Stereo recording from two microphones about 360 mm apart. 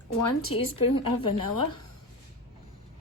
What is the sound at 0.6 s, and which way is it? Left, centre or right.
Speech, left.